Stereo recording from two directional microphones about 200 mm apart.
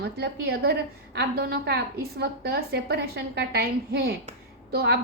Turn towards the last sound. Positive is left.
turn(degrees=-50)  # may be behind; listen again after turning